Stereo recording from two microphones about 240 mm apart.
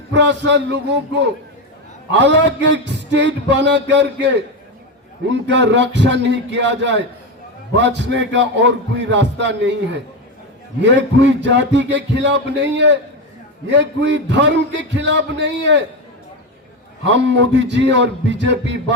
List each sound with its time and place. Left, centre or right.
0.1 s a man's voice: right
17.1 s a man's voice: right